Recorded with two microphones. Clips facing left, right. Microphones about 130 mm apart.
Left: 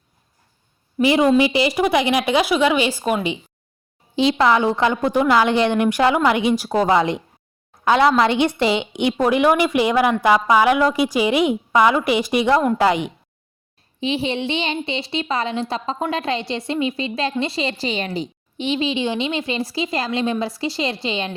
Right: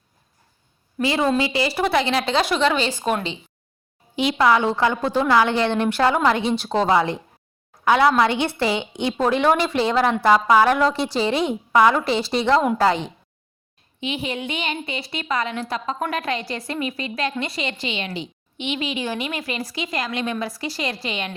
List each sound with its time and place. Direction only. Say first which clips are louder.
1.0 s a woman's voice: left 5 dB; 15° left (ahead or behind)
4.1 s a woman's voice: left 2 dB; 30° left (ahead or behind)
14.0 s a woman's voice: left 5 dB; 30° left (ahead or behind)